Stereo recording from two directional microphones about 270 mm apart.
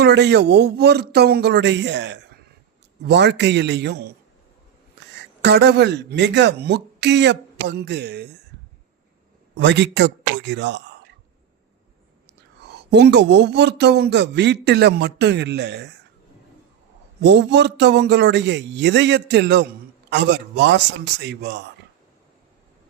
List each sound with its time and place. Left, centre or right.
0.0 s a man's voice: right
9.6 s a man's voice: right
12.6 s a man's voice: right
17.2 s a man's voice: right